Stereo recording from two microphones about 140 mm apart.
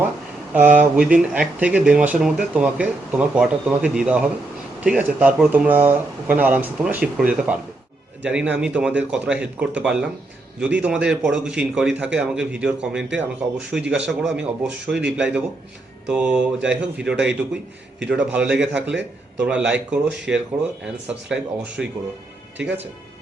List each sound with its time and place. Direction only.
0.5 s speech: 10° right (ahead or behind)